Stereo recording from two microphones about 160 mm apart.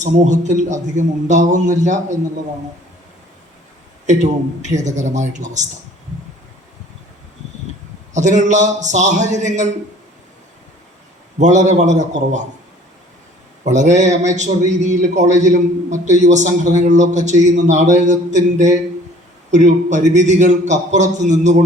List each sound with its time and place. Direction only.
0.0 s a man's voice: 50° right (ahead or behind)
4.0 s a man's voice: 50° right (ahead or behind)
8.1 s a man's voice: 50° right (ahead or behind)
11.3 s a man's voice: 50° right (ahead or behind)
13.7 s a man's voice: 50° right (ahead or behind)